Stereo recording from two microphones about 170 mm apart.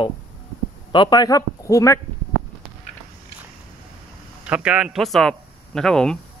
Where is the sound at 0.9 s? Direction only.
25° left (ahead or behind).